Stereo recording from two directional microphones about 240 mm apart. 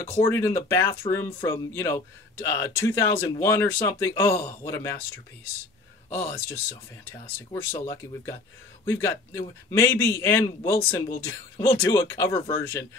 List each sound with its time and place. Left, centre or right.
0.2 s speech: centre
6.0 s speech: left
7.8 s a man's voice: centre